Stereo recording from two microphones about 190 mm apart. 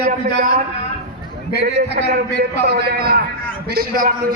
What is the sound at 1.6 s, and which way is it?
A man's voice, 55° right (ahead or behind).